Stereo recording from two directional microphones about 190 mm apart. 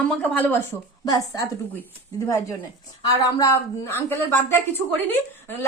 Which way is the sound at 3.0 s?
15° left (ahead or behind).